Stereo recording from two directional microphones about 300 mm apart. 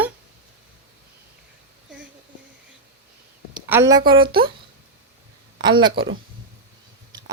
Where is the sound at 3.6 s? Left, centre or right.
Centre.